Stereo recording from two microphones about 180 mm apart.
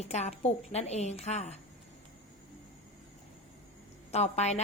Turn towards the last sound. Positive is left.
turn(degrees=35)  # may be behind; listen again after turning